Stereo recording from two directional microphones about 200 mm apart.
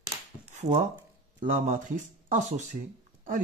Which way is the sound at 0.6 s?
40° right (ahead or behind).